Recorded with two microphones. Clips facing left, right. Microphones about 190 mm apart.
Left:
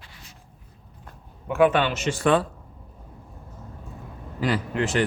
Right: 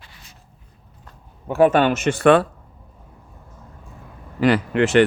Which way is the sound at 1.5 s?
40° right (ahead or behind).